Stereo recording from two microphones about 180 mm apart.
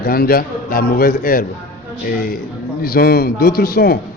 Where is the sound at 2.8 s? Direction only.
55° left (ahead or behind).